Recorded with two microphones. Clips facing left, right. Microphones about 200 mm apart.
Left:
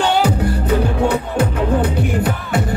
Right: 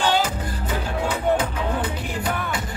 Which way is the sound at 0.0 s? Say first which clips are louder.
Left 6 dB; 65° left (ahead or behind).